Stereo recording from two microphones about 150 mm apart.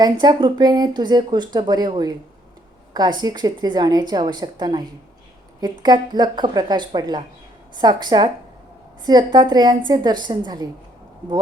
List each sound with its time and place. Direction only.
0.0 s speech: 30° right (ahead or behind)